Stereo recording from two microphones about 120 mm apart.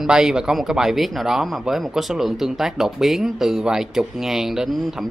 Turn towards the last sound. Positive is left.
turn(degrees=0)  # may be behind; listen again after turning